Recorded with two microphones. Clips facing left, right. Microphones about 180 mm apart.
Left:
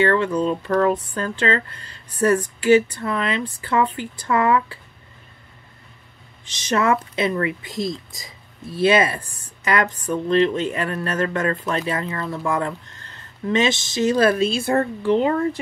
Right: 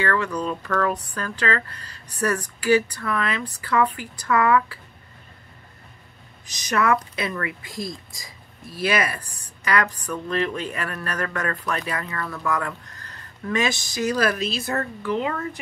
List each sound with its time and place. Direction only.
0.0 s speech: 25° left (ahead or behind)
6.4 s speech: 25° left (ahead or behind)